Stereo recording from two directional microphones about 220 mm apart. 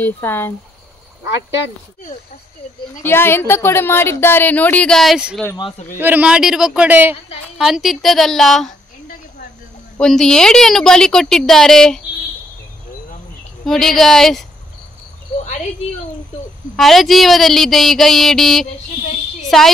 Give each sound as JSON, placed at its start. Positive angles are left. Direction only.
{"t": 0.0, "sound": "speech", "side_deg": 10}
{"t": 3.0, "sound": "speech", "side_deg": 10}
{"t": 5.4, "sound": "speech", "side_deg": 15}
{"t": 5.9, "sound": "a woman's voice", "side_deg": -10}
{"t": 9.9, "sound": "a woman's voice", "side_deg": 5}
{"t": 13.7, "sound": "a woman's voice", "side_deg": 0}
{"t": 16.7, "sound": "a woman's voice", "side_deg": 0}
{"t": 19.4, "sound": "a sound", "side_deg": 0}